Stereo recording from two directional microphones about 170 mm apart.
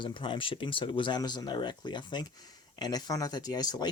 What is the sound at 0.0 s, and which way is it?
Speech, 30° left (ahead or behind).